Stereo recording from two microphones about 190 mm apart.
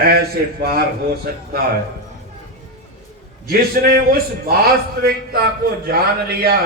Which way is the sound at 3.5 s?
55° right (ahead or behind).